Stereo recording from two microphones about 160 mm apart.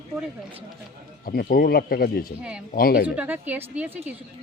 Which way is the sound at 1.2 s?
65° left (ahead or behind).